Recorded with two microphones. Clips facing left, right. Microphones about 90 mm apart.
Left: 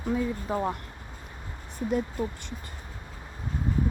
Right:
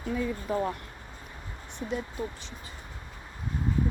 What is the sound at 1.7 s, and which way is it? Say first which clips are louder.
Speech: left 5 dB; 50° left (ahead or behind).